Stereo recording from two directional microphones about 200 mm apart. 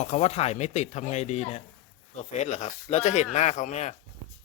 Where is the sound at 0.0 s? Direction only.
35° left (ahead or behind).